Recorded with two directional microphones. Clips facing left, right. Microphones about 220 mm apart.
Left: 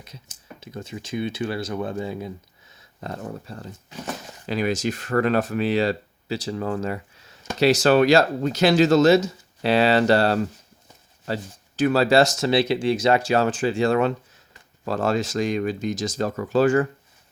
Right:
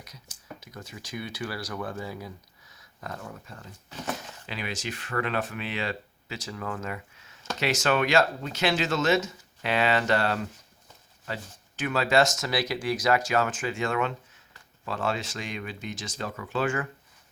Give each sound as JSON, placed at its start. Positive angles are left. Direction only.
{"t": 0.0, "sound": "speech", "side_deg": 25}
{"t": 11.8, "sound": "speech", "side_deg": 35}